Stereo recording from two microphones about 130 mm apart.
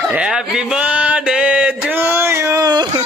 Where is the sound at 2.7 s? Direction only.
35° right (ahead or behind).